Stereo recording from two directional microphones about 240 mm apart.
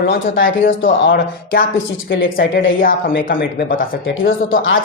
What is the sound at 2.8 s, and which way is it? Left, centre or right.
Speech, left.